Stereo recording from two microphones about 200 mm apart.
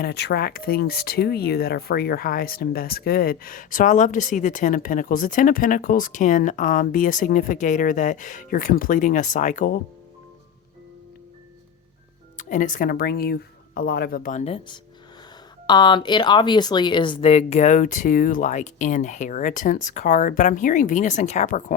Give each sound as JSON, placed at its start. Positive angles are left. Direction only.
{"t": 0.0, "sound": "speech", "side_deg": 55}
{"t": 12.4, "sound": "speech", "side_deg": 40}